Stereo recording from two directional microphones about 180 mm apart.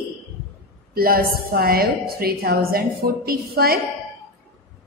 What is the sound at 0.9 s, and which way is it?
A woman's voice, 55° right (ahead or behind).